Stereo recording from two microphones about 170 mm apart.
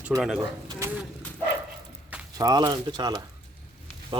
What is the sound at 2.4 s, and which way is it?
Speech, 20° right (ahead or behind).